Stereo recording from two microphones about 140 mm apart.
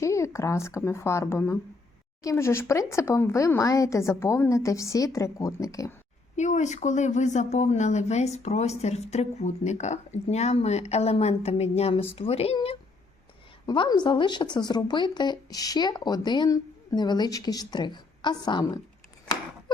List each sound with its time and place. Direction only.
0.0 s speech: 20° left (ahead or behind)
6.3 s speech: 55° left (ahead or behind)
13.7 s a woman's voice: 30° left (ahead or behind)